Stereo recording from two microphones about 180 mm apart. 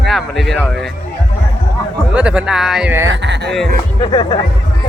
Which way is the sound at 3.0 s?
85° right.